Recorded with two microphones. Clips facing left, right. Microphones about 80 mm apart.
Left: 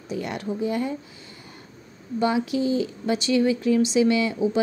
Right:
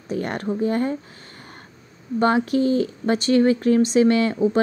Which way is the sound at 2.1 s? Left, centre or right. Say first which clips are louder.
Right 4 dB; right.